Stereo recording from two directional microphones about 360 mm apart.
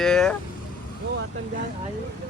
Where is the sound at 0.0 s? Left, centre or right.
Centre.